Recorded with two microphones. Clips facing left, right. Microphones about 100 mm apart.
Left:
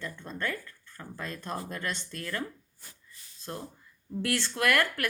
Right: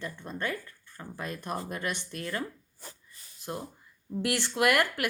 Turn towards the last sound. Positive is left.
turn(degrees=-20)  # may be behind; listen again after turning